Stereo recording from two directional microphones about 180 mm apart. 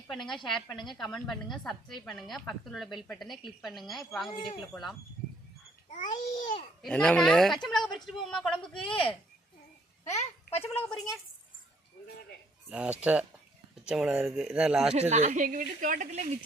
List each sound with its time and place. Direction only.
0.1 s speech: centre (ahead or behind)
4.3 s a child's voice: 25° left (ahead or behind)
4.7 s speech: centre (ahead or behind)
6.1 s a child's voice: 25° left (ahead or behind)
6.8 s speech: 5° left (ahead or behind)
8.9 s a child's voice: 30° left (ahead or behind)
10.6 s speech: 5° left (ahead or behind)
12.7 s speech: 5° right (ahead or behind)
15.1 s a woman's voice: 40° right (ahead or behind)